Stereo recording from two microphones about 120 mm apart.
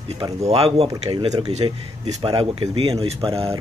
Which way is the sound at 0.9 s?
35° right (ahead or behind).